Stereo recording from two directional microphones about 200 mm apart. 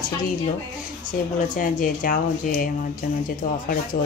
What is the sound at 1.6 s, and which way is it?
Speech, 40° left (ahead or behind).